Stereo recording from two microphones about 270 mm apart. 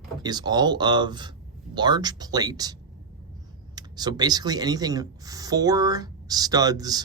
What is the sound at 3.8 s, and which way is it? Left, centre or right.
Speech, centre.